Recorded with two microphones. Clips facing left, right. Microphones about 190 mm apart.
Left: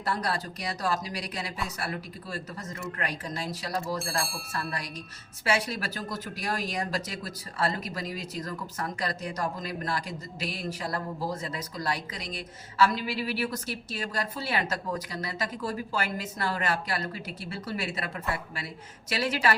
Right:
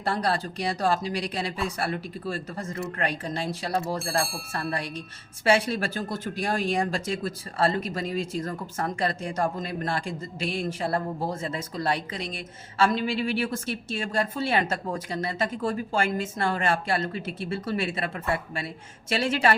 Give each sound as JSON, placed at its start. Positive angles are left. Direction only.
{"t": 0.0, "sound": "speech", "side_deg": -30}
{"t": 4.0, "sound": "speech", "side_deg": 0}
{"t": 5.5, "sound": "speech", "side_deg": -30}
{"t": 19.1, "sound": "speech", "side_deg": -25}